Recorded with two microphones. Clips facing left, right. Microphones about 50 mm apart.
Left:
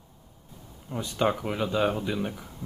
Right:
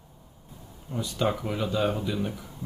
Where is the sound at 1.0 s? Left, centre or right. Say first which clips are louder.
Left 2 dB; left.